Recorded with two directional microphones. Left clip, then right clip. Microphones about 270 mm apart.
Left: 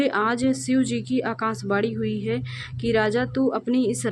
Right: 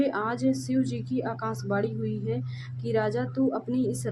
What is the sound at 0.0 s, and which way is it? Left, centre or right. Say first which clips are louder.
A woman's voice: left 5 dB; left.